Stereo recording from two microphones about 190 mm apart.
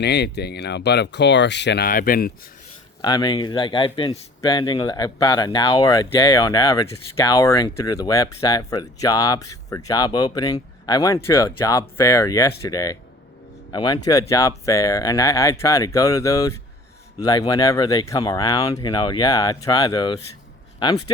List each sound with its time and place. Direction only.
0.0 s speech: 60° left (ahead or behind)
3.0 s speech: 20° left (ahead or behind)